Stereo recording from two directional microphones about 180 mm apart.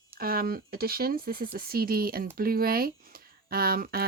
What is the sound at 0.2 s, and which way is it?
Speech, 55° right (ahead or behind).